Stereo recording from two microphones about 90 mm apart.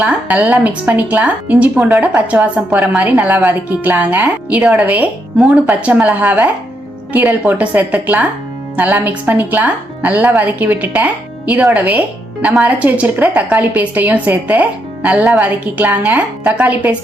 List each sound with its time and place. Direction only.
0.0 s a woman's voice: 20° right (ahead or behind)